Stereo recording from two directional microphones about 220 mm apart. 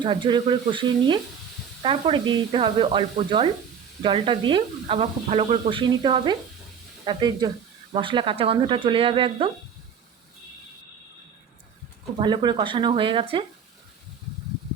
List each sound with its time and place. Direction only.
0.0 s speech: 20° right (ahead or behind)
12.2 s speech: 20° right (ahead or behind)